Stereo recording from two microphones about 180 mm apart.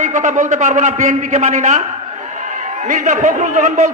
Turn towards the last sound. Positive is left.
turn(degrees=-40)  # may be behind; listen again after turning